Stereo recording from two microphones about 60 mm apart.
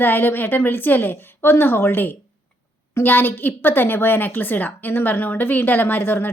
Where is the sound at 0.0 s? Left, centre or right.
Left.